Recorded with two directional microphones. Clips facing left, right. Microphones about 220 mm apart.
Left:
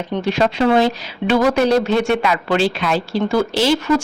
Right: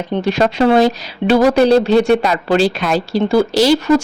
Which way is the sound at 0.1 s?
40° right (ahead or behind).